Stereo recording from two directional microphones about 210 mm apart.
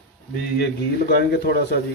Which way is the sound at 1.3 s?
50° left (ahead or behind).